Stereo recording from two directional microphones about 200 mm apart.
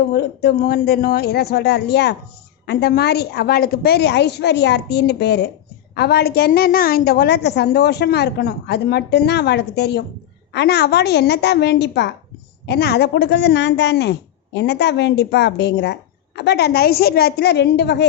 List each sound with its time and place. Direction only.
0.1 s a woman's voice: 55° left (ahead or behind)